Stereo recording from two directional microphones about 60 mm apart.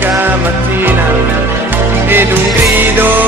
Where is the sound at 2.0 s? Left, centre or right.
Right.